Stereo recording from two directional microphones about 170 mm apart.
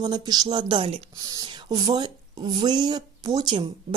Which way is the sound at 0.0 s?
25° right (ahead or behind).